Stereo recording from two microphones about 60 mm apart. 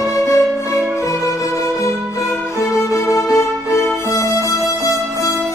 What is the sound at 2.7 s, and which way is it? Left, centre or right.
Music, left.